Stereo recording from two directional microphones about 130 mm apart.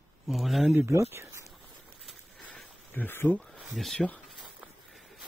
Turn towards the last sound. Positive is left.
turn(degrees=5)  # may be behind; listen again after turning